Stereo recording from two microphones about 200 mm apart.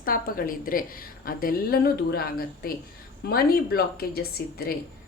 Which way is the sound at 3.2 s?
50° left (ahead or behind).